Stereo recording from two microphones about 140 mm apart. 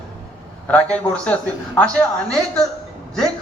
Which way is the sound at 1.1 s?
10° left (ahead or behind).